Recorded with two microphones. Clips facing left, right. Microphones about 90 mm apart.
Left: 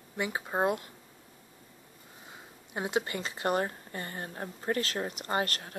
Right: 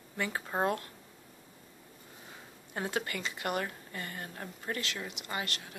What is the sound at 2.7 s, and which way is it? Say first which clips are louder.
Speech: left 3 dB; 20° left (ahead or behind).